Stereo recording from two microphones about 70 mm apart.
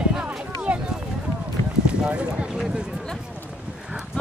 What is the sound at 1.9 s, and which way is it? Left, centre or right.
Clip-clop, centre.